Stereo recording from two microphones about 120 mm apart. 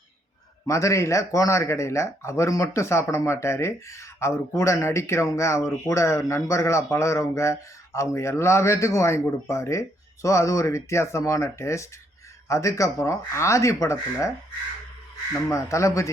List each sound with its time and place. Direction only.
0.7 s speech: 25° left (ahead or behind)
15.4 s speech: 25° left (ahead or behind)